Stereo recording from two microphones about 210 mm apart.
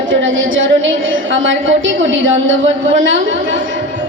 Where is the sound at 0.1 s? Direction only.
65° right (ahead or behind).